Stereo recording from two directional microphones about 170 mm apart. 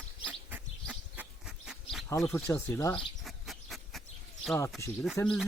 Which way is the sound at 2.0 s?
15° left (ahead or behind).